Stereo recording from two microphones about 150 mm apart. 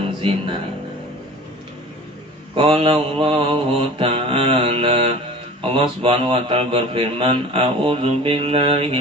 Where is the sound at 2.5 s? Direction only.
35° right (ahead or behind).